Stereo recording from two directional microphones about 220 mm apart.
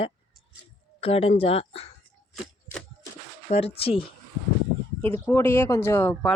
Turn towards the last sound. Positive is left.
turn(degrees=10)  # may be behind; listen again after turning